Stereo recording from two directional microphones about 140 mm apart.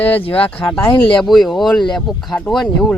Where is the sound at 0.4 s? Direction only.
15° left (ahead or behind).